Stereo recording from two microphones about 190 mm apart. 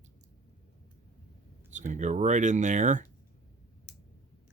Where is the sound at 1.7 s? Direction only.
40° right (ahead or behind).